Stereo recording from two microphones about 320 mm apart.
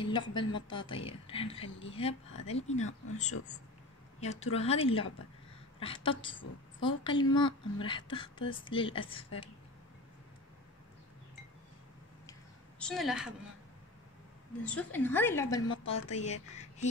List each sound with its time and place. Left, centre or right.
0.0 s a woman's voice: centre
4.2 s a woman's voice: centre
12.3 s a sound: centre
14.6 s a woman's voice: centre; by 16.9 s left